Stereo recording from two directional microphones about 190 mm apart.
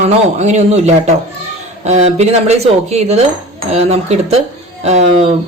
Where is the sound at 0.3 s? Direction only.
35° right (ahead or behind).